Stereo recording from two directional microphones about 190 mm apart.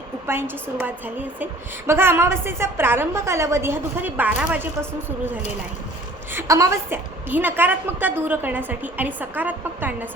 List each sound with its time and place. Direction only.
0.3 s a woman's voice: 10° right (ahead or behind)